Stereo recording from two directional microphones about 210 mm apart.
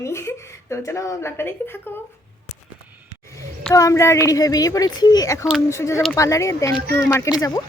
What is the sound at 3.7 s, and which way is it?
Speech, 15° left (ahead or behind).